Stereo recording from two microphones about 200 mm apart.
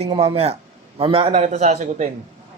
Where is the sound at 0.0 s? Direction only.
25° right (ahead or behind).